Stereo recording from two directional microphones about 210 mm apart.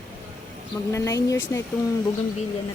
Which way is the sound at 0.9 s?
15° left (ahead or behind).